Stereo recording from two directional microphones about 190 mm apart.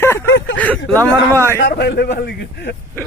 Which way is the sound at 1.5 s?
65° left (ahead or behind).